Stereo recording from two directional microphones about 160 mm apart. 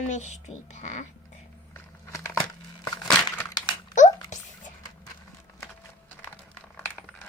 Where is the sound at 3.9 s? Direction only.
50° left (ahead or behind).